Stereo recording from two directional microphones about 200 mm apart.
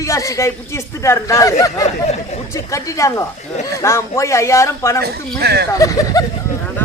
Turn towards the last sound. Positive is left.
turn(degrees=15)  # may be behind; listen again after turning